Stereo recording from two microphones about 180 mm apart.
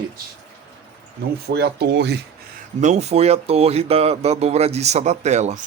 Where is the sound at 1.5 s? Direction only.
65° right (ahead or behind).